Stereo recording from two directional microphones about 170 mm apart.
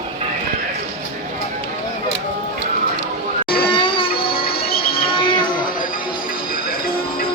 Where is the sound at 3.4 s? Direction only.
30° left (ahead or behind).